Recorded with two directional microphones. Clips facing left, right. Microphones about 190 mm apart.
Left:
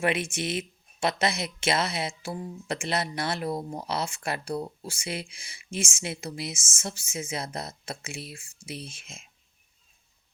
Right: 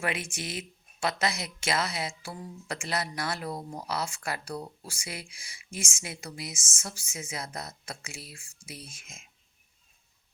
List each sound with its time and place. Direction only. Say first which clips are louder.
0.0 s speech: left 6 dB; 25° left (ahead or behind)